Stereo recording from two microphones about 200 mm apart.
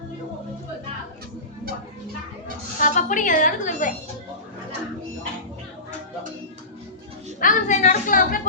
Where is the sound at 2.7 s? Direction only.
40° left (ahead or behind).